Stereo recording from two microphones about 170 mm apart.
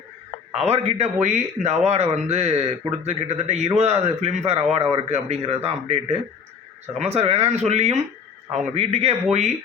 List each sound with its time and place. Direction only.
0.5 s a man's voice: 40° right (ahead or behind)